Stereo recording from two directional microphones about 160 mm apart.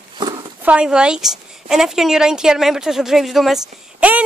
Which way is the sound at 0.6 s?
5° right (ahead or behind).